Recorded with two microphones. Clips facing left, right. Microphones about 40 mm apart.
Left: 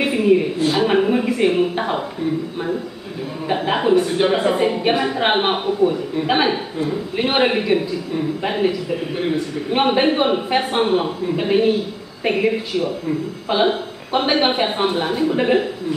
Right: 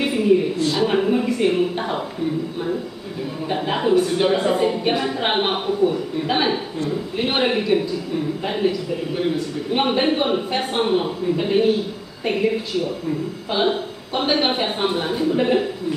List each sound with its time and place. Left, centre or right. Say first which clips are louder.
0.0 s a woman's voice: left 2 dB; centre
3.4 s a woman's voice: left 3 dB; centre
6.1 s a man's voice: left 3 dB; centre